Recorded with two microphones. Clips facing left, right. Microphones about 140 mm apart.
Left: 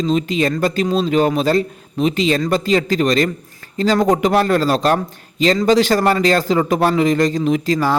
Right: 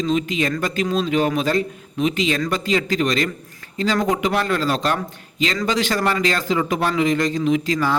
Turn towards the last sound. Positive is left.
turn(degrees=40)  # may be behind; listen again after turning